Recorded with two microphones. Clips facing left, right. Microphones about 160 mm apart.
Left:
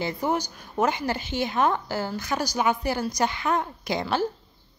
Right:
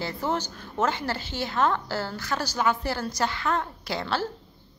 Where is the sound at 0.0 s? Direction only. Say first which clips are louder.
Left 2 dB; 15° left (ahead or behind).